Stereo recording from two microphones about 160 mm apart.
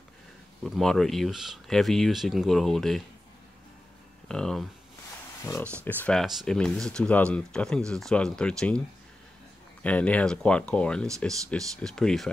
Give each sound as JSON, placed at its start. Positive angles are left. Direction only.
{"t": 0.7, "sound": "speech", "side_deg": 0}
{"t": 4.3, "sound": "speech", "side_deg": 5}
{"t": 5.4, "sound": "speech", "side_deg": 20}
{"t": 9.8, "sound": "speech", "side_deg": 10}